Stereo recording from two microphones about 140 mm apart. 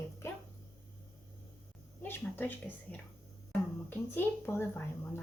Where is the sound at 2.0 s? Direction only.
15° left (ahead or behind).